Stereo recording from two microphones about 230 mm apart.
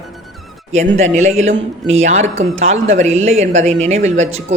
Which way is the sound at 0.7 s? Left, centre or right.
Right.